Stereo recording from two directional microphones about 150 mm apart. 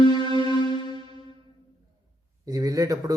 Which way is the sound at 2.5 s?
20° right (ahead or behind).